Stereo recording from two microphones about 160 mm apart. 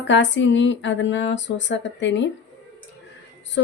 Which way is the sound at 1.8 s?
90° left.